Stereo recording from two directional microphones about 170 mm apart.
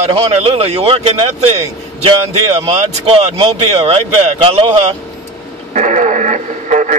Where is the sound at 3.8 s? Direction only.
35° right (ahead or behind).